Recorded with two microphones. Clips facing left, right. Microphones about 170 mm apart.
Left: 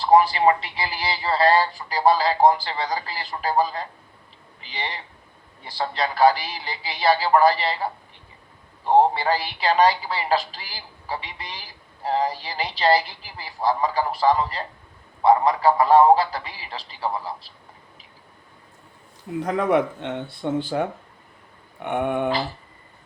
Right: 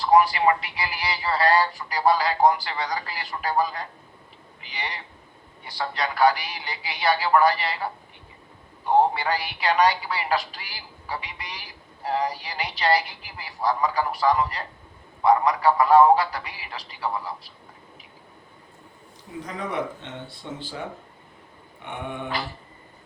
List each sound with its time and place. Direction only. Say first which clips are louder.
0.0 s speech: left 2 dB; 30° left (ahead or behind)
9.1 s speech: left 3 dB; 30° left (ahead or behind)
19.4 s speech: left 9 dB; 60° left (ahead or behind)